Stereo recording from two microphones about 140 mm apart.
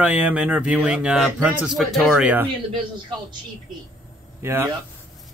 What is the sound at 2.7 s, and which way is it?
Speech, 30° right (ahead or behind).